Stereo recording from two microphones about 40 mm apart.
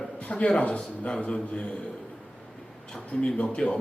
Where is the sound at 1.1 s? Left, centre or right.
Left.